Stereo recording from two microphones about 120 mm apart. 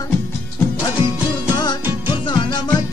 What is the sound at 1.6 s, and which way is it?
Music, 40° left (ahead or behind).